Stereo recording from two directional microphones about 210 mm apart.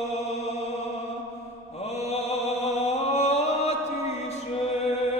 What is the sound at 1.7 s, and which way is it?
Mantra, 30° left (ahead or behind).